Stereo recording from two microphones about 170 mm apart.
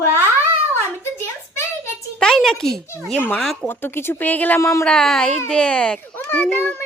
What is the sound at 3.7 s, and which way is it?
A child's voice, 10° left (ahead or behind).